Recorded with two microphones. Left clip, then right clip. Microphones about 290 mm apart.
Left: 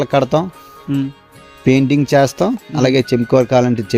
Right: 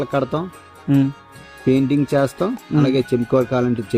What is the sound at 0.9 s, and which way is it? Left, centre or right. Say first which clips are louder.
Speech: right 2 dB; centre.